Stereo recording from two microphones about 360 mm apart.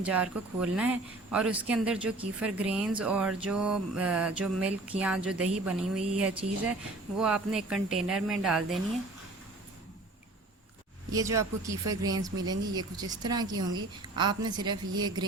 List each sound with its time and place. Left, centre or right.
0.0 s speech: centre
6.4 s speech: centre
7.2 s speech: centre
11.1 s speech: centre